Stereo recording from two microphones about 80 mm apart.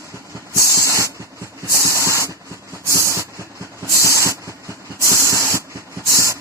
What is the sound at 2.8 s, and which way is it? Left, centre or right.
Train, right.